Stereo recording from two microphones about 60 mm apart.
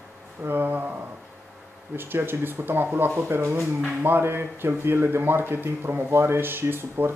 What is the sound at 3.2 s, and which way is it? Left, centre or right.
Speech, right.